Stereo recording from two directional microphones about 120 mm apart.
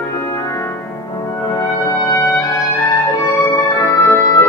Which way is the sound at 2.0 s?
25° left (ahead or behind).